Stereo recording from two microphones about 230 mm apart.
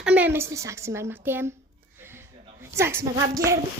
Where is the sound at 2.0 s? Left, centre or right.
Centre.